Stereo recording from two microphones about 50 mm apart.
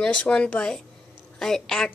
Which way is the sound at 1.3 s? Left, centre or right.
Centre.